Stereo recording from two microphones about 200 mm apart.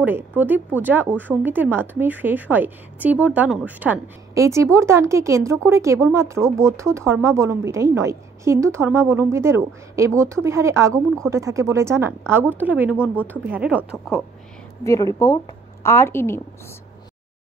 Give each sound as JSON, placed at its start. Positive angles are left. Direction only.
{"t": 0.0, "sound": "a woman's voice", "side_deg": -10}
{"t": 14.8, "sound": "a woman's voice", "side_deg": 15}